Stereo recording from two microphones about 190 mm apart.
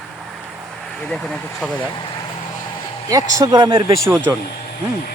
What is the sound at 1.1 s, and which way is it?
Speech, 5° left (ahead or behind).